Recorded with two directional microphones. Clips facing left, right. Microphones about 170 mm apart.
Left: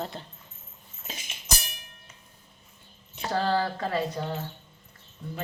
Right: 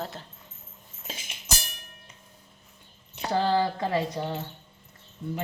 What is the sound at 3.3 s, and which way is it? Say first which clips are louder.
Speech: right 2 dB; 15° right (ahead or behind).